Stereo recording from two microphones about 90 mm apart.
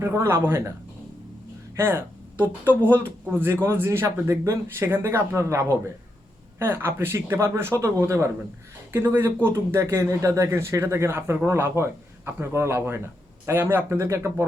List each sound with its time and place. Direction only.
0.0 s speech: 35° right (ahead or behind)
1.7 s speech: 25° right (ahead or behind)